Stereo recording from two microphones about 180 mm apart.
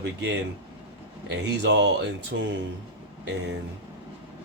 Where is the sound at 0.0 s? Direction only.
80° right.